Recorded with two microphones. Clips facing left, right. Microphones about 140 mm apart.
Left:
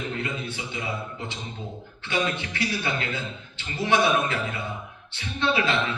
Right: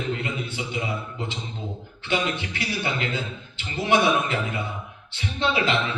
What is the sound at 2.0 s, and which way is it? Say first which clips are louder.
A man's voice: right 1 dB; 20° right (ahead or behind).